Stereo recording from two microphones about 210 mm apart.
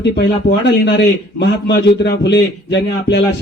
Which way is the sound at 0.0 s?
55° left (ahead or behind).